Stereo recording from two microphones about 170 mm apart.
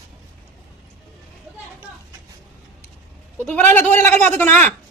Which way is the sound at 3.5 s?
10° left (ahead or behind).